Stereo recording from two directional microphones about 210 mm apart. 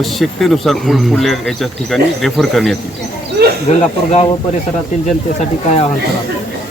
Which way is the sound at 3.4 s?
50° right (ahead or behind).